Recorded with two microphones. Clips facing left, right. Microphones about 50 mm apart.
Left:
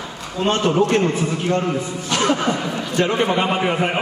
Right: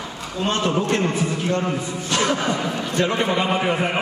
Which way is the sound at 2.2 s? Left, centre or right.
Left.